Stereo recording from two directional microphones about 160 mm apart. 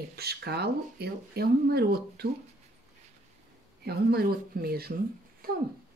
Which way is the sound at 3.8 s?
80° right.